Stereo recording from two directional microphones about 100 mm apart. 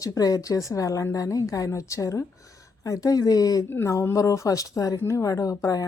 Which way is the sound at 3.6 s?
25° left (ahead or behind).